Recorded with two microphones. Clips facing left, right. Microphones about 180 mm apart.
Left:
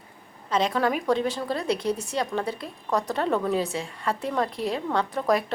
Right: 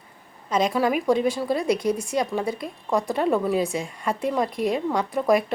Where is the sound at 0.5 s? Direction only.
10° right (ahead or behind).